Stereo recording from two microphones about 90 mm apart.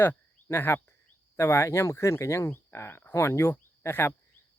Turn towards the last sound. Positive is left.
turn(degrees=25)  # may be behind; listen again after turning